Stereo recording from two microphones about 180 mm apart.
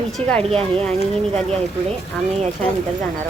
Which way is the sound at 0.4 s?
35° right (ahead or behind).